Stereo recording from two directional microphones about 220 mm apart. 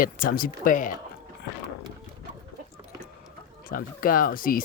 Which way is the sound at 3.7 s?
40° left (ahead or behind).